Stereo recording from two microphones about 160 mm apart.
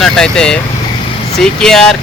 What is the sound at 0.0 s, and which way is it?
Speech, 5° left (ahead or behind).